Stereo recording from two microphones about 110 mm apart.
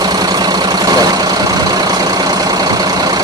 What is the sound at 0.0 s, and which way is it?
Vehicle, 40° right (ahead or behind).